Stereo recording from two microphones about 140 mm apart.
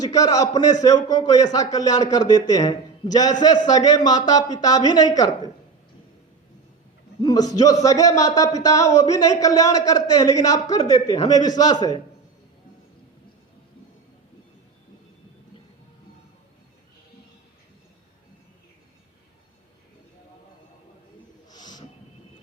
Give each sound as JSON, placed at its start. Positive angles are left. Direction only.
{"t": 0.0, "sound": "a man's voice", "side_deg": 25}
{"t": 7.2, "sound": "a man's voice", "side_deg": 30}
{"t": 21.5, "sound": "a sound", "side_deg": 30}